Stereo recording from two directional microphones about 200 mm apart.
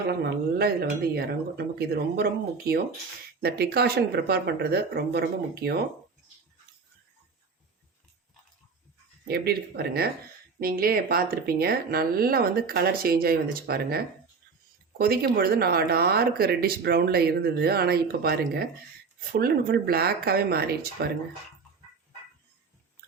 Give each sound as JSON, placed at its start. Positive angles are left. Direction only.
{"t": 0.6, "sound": "speech", "side_deg": -50}
{"t": 3.4, "sound": "speech", "side_deg": -50}
{"t": 9.2, "sound": "speech", "side_deg": -50}